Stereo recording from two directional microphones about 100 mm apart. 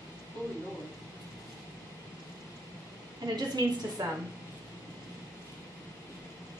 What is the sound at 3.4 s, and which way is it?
Speech, 40° right (ahead or behind).